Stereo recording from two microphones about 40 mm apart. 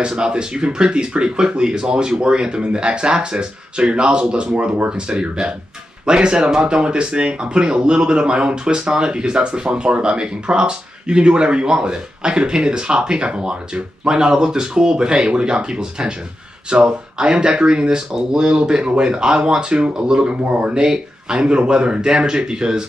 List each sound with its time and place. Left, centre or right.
0.0 s speech: right